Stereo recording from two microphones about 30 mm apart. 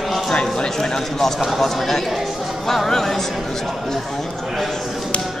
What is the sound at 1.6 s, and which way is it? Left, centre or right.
Speech, centre.